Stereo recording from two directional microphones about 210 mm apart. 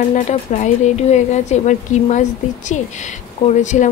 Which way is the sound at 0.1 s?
35° left (ahead or behind).